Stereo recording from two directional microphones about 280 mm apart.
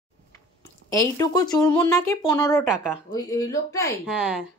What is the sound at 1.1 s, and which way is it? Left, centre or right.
Speech, centre.